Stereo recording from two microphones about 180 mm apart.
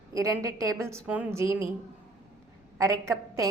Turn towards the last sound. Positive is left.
turn(degrees=-15)  # may be behind; listen again after turning